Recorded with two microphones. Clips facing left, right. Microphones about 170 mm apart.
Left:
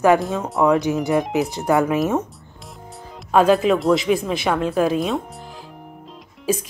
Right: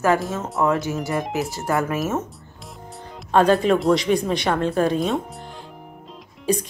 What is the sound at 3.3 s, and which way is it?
A woman's voice, 5° left (ahead or behind).